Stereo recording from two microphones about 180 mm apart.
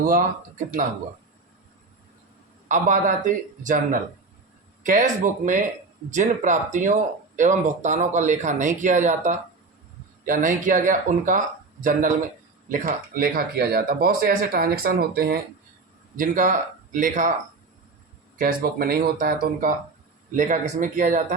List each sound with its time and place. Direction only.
0.0 s speech: 50° right (ahead or behind)
2.6 s speech: 45° right (ahead or behind)
18.3 s speech: 55° right (ahead or behind)